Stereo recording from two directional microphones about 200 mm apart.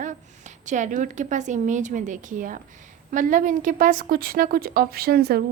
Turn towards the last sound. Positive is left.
turn(degrees=-50)  # may be behind; listen again after turning